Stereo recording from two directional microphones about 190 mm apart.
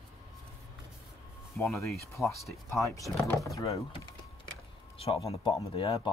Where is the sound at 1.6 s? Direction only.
15° left (ahead or behind).